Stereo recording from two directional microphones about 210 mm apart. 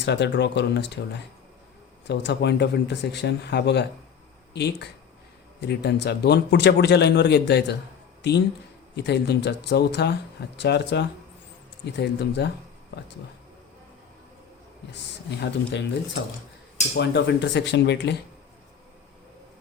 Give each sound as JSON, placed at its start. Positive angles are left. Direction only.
{"t": 0.0, "sound": "speech", "side_deg": 55}
{"t": 2.0, "sound": "speech", "side_deg": 55}
{"t": 15.3, "sound": "speech", "side_deg": 55}
{"t": 17.0, "sound": "speech", "side_deg": 55}